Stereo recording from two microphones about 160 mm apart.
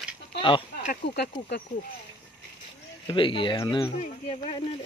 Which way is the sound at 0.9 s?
90° left.